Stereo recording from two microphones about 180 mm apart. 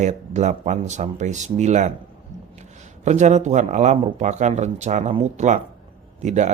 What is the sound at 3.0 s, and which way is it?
Speech, 40° right (ahead or behind).